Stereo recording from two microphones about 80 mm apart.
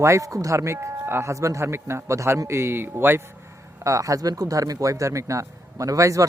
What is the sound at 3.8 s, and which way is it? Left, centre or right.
Speech, right.